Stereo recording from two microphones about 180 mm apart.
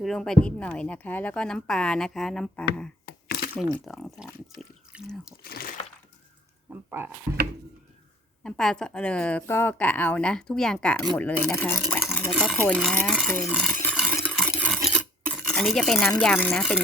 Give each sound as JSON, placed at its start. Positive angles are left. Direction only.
{"t": 0.0, "sound": "speech", "side_deg": 0}
{"t": 3.1, "sound": "a sound", "side_deg": 60}
{"t": 3.6, "sound": "speech", "side_deg": 0}
{"t": 5.4, "sound": "speech", "side_deg": 60}
{"t": 6.7, "sound": "speech", "side_deg": -10}
{"t": 8.4, "sound": "speech", "side_deg": 5}
{"t": 11.8, "sound": "a sound", "side_deg": 0}
{"t": 14.7, "sound": "filing", "side_deg": 0}
{"t": 15.3, "sound": "stir", "side_deg": 0}
{"t": 16.0, "sound": "speech", "side_deg": 10}